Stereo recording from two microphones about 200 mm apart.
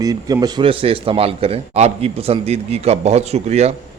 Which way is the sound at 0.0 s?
15° right (ahead or behind).